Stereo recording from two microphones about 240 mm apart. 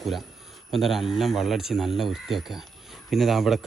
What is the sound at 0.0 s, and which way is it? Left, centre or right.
Speech, centre.